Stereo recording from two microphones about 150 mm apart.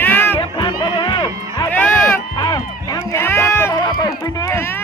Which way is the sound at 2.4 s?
30° left (ahead or behind).